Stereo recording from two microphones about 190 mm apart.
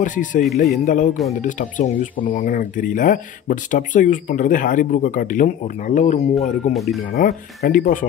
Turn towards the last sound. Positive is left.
turn(degrees=45)  # may be behind; listen again after turning